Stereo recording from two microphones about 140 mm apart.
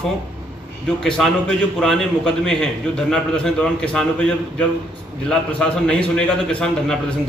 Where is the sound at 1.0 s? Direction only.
5° left (ahead or behind).